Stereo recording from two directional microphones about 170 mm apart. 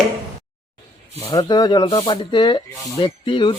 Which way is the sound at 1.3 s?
25° left (ahead or behind).